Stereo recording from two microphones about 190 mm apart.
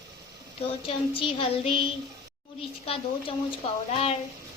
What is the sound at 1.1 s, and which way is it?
Speech, 30° left (ahead or behind).